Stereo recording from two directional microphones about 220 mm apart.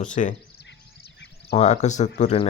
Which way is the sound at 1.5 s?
30° left (ahead or behind).